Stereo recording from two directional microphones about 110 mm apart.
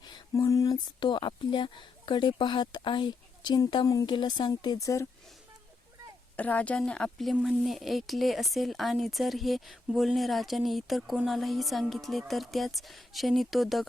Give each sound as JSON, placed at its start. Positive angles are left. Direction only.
{"t": 0.0, "sound": "a sound", "side_deg": 35}
{"t": 0.9, "sound": "speech", "side_deg": 45}
{"t": 6.3, "sound": "speech", "side_deg": 15}